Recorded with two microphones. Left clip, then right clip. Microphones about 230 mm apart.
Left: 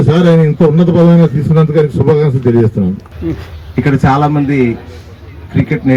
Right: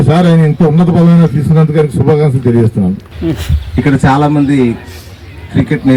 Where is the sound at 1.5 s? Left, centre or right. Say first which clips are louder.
Left 1 dB; right.